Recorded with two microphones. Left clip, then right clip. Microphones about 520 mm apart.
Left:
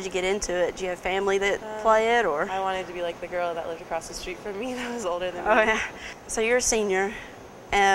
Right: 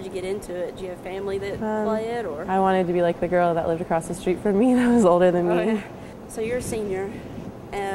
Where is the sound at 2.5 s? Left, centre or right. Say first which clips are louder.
Right 8 dB; right.